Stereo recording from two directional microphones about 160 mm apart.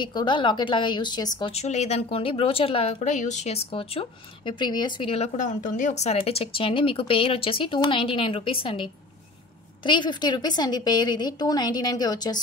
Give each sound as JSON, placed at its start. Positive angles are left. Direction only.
{"t": 0.0, "sound": "a woman's voice", "side_deg": 30}
{"t": 1.4, "sound": "a woman's voice", "side_deg": 40}